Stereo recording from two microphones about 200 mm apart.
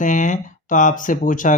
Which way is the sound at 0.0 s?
40° left (ahead or behind).